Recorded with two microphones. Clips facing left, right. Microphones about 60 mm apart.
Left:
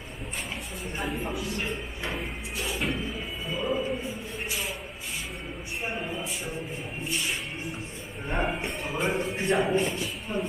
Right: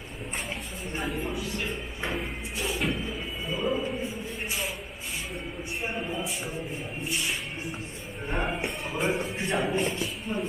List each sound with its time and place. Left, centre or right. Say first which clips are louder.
0.9 s speech: even; centre
3.4 s music: even; centre
5.8 s speech: even; centre
8.3 s speech: left 1 dB; centre